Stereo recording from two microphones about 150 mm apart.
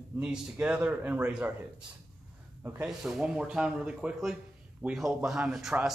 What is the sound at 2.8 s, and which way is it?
Speech, 5° right (ahead or behind).